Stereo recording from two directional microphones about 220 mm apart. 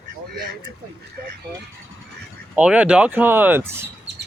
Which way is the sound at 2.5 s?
5° right (ahead or behind).